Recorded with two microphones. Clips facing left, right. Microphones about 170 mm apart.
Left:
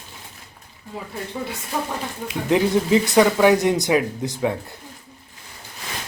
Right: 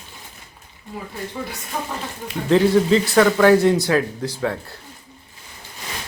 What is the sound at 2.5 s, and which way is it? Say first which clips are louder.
Speech: right 3 dB; 15° left (ahead or behind).